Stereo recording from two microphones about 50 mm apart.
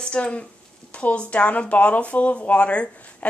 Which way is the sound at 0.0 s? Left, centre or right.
Left.